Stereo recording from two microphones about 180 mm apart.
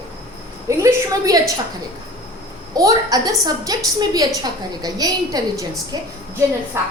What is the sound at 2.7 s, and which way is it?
A child's voice, 20° right (ahead or behind).